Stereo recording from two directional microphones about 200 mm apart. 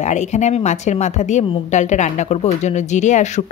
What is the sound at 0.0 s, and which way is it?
A woman's voice, 35° left (ahead or behind).